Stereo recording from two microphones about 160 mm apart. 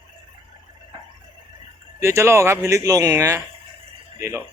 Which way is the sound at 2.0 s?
15° right (ahead or behind).